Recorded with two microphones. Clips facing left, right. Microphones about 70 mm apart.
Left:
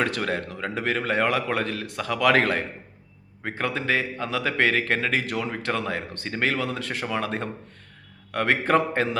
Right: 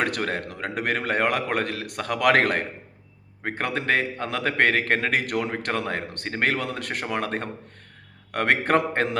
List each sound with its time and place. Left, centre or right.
0.0 s a man's voice: right
0.4 s a man's voice: right